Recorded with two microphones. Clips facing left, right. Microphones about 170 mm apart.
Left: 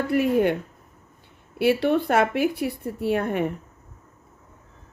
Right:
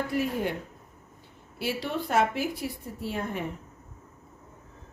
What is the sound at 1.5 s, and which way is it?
Speech, 60° left (ahead or behind).